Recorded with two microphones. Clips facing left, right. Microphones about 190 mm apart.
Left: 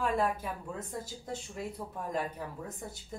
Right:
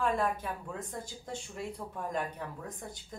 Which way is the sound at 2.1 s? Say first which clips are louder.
Left 1 dB; 5° left (ahead or behind).